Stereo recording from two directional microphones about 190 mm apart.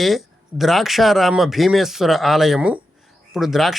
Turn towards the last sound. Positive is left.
turn(degrees=0)  # may be behind; listen again after turning